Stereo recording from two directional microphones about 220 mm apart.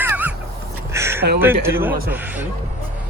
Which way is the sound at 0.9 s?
10° right (ahead or behind).